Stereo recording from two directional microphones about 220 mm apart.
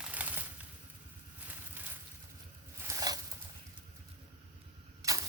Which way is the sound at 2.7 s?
15° right (ahead or behind).